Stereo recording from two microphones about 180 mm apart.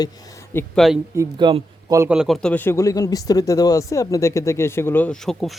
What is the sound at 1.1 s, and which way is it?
Speech, 20° right (ahead or behind).